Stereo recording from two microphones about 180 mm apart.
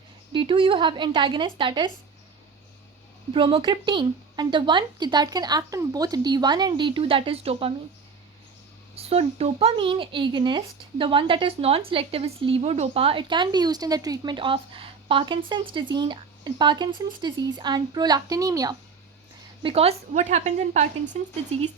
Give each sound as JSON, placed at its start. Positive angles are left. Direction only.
{"t": 0.3, "sound": "speech", "side_deg": -30}
{"t": 3.3, "sound": "speech", "side_deg": -25}
{"t": 9.0, "sound": "speech", "side_deg": -35}
{"t": 19.6, "sound": "a woman's voice", "side_deg": -35}